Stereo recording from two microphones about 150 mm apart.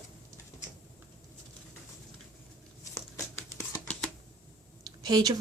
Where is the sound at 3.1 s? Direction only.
20° left (ahead or behind).